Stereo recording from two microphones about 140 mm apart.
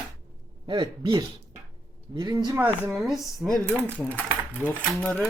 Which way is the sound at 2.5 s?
15° right (ahead or behind).